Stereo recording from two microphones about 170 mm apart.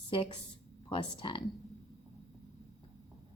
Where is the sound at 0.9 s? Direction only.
30° left (ahead or behind).